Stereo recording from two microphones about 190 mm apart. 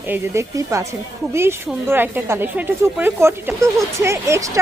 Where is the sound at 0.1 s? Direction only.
15° right (ahead or behind).